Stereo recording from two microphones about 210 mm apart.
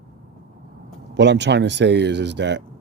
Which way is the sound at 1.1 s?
55° right (ahead or behind).